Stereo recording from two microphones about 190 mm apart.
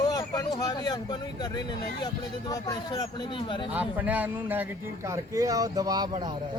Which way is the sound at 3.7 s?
10° right (ahead or behind).